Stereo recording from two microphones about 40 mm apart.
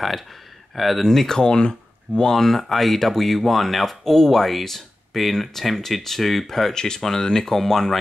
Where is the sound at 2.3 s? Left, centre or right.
Centre.